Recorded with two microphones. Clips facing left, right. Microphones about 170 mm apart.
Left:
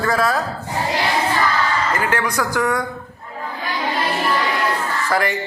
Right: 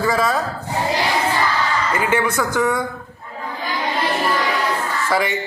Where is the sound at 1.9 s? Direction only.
5° right (ahead or behind).